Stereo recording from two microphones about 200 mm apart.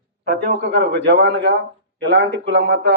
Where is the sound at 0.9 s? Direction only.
65° right (ahead or behind).